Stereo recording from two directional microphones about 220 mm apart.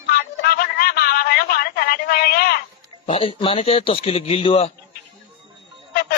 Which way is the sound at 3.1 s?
25° left (ahead or behind).